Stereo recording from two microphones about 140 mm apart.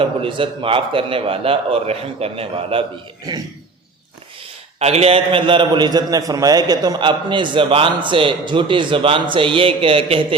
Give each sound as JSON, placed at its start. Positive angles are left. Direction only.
{"t": 0.0, "sound": "a man's voice", "side_deg": -40}
{"t": 4.8, "sound": "a man's voice", "side_deg": -50}